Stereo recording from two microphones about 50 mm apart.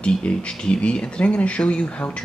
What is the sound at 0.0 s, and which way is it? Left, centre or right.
Speech, left.